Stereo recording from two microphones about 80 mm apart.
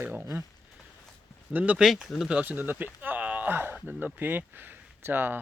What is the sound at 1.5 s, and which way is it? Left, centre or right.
Speech, centre.